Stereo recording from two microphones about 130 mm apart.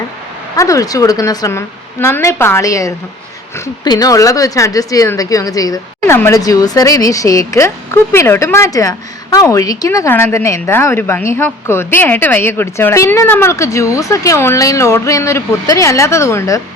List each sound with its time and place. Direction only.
0.5 s speech: 25° left (ahead or behind)